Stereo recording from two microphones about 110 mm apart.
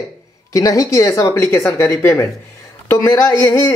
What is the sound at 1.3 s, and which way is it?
Speech, 20° left (ahead or behind).